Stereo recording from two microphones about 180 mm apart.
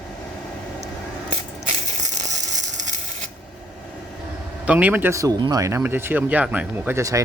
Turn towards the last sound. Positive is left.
turn(degrees=-15)  # may be behind; listen again after turning